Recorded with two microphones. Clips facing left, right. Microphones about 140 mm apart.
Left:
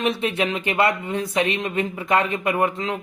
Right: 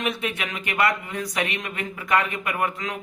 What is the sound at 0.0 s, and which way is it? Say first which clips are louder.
Speech: left 6 dB; 30° left (ahead or behind).